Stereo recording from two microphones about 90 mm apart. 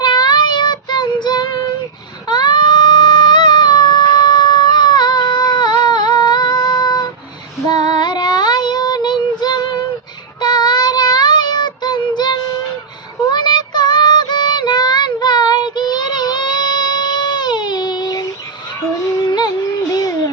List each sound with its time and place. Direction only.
0.0 s child singing: 50° left (ahead or behind)
2.2 s baby cry: 55° left (ahead or behind)
7.7 s child singing: 55° left (ahead or behind)
19.9 s a sound: 40° left (ahead or behind)